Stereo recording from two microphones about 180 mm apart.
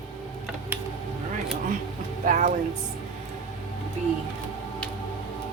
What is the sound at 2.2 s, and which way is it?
Speech, 45° right (ahead or behind).